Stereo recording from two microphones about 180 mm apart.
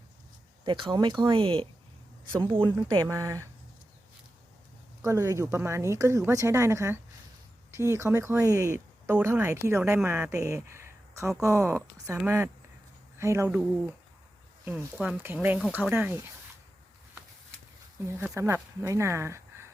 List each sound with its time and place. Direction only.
0.6 s speech: 25° right (ahead or behind)
5.0 s speech: 15° right (ahead or behind)
18.2 s speech: 15° right (ahead or behind)